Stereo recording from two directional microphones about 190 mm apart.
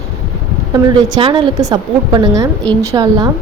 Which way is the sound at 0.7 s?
20° right (ahead or behind).